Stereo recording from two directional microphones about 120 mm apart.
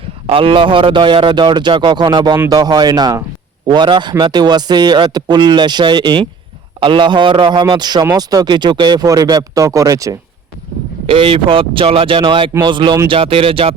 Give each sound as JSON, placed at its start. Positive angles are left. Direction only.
{"t": 0.3, "sound": "a man's voice", "side_deg": -50}
{"t": 11.0, "sound": "a man's voice", "side_deg": -50}